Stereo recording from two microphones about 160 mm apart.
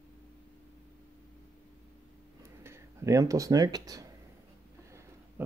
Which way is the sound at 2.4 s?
15° right (ahead or behind).